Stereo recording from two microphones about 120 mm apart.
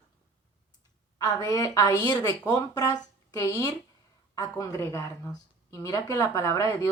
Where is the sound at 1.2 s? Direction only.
30° left (ahead or behind).